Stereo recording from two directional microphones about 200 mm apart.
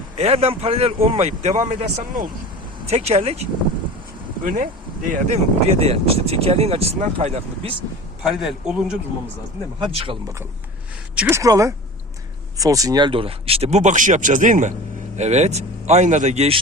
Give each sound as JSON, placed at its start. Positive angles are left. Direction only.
{"t": 0.2, "sound": "a man's voice", "side_deg": -30}
{"t": 4.4, "sound": "speech", "side_deg": -40}
{"t": 8.2, "sound": "speech", "side_deg": 0}
{"t": 9.8, "sound": "a man's voice", "side_deg": -30}
{"t": 11.1, "sound": "speech", "side_deg": -10}